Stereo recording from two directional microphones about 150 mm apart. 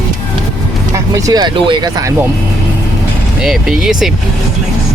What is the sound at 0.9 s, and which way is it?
Speech, 20° right (ahead or behind).